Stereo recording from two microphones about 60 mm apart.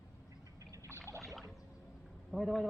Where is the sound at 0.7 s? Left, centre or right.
Right.